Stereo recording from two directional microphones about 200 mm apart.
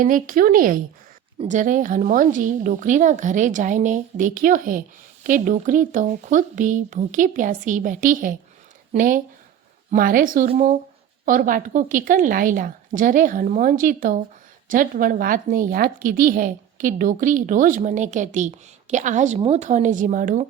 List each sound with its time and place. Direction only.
0.0 s a woman's voice: 45° right (ahead or behind)